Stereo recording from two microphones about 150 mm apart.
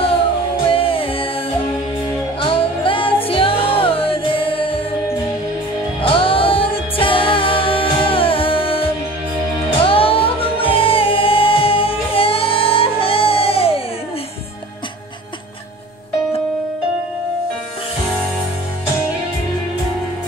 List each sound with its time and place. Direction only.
0.7 s music: 35° left (ahead or behind)
2.4 s music: 35° left (ahead or behind)
5.9 s music: 35° left (ahead or behind)
9.8 s music: 40° left (ahead or behind)